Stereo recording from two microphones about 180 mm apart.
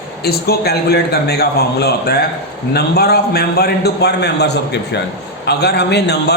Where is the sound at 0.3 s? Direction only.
60° left (ahead or behind).